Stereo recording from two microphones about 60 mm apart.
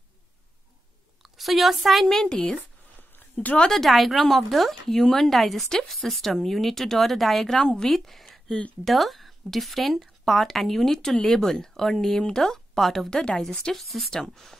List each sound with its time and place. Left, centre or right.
1.2 s a woman's voice: centre
2.2 s a woman's voice: centre
13.7 s speech: centre